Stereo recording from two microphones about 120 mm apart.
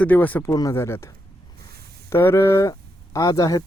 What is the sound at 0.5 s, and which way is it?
Speech, 30° left (ahead or behind).